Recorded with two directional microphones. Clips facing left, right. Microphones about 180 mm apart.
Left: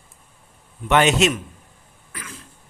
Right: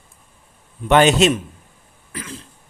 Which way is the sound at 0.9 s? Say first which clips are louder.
Right 4 dB; 35° right (ahead or behind).